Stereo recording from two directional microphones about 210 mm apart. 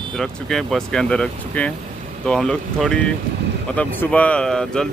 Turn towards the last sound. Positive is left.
turn(degrees=5)  # may be behind; listen again after turning